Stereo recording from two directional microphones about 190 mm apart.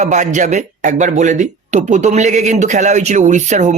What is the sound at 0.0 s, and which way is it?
Speech, 40° right (ahead or behind).